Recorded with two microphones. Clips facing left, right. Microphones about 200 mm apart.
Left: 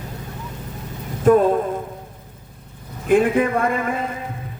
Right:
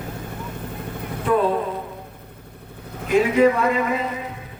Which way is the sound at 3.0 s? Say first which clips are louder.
Even; 50° left (ahead or behind).